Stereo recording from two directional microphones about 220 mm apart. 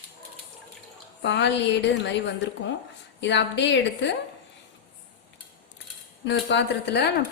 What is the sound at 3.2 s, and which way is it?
Speech, 55° left (ahead or behind).